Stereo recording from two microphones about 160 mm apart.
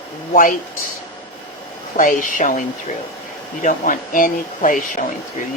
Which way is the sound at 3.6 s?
55° left (ahead or behind).